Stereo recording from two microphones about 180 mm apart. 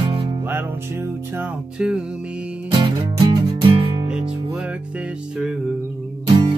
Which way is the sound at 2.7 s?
25° right (ahead or behind).